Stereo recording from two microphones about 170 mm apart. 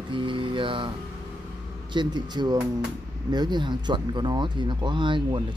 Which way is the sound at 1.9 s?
25° right (ahead or behind).